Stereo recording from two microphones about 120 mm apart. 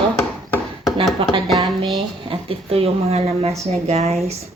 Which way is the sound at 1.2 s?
50° right (ahead or behind).